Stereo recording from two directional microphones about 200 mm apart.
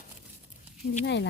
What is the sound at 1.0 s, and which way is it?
Speech, 60° left (ahead or behind).